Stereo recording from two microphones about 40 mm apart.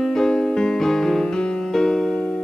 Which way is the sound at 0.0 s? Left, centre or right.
Centre.